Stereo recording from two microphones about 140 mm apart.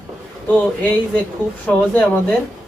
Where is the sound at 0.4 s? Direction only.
10° left (ahead or behind).